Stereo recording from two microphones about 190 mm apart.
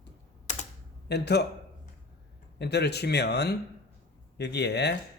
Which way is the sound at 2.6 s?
60° left (ahead or behind).